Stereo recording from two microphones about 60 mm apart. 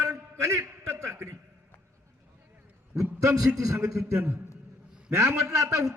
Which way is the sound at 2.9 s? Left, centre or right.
Right.